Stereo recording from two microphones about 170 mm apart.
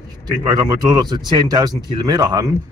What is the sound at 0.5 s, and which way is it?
Speech, 25° right (ahead or behind).